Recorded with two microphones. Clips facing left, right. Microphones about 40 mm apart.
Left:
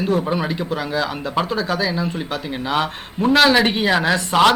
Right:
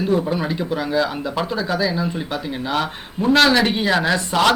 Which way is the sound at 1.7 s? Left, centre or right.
Centre.